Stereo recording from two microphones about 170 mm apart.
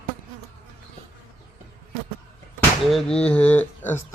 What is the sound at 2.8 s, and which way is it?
Speech, centre (ahead or behind).